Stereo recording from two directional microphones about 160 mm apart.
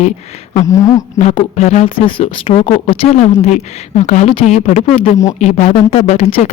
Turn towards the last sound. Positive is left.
turn(degrees=40)  # may be behind; listen again after turning